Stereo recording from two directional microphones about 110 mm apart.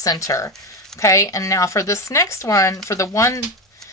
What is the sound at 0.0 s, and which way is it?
Speech, 30° left (ahead or behind).